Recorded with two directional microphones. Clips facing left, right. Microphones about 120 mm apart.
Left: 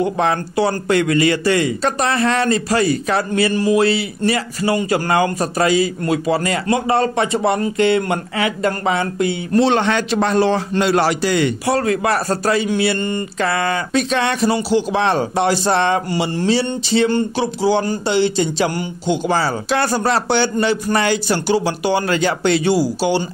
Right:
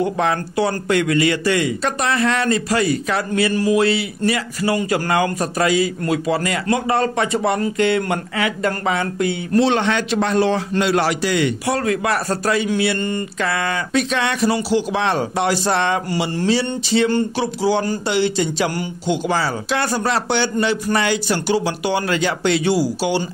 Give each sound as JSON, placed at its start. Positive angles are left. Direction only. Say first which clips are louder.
{"t": 0.0, "sound": "speech", "louder": "left 1 dB", "side_deg": 30}
{"t": 9.6, "sound": "a man's voice", "louder": "left 2 dB", "side_deg": 40}